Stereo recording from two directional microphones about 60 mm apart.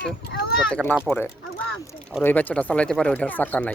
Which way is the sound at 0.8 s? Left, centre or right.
Centre.